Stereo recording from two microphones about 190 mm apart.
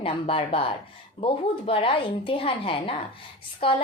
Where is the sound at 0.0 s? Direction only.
30° left (ahead or behind).